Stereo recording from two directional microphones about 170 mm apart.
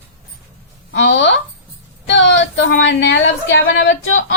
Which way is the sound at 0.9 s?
90° left.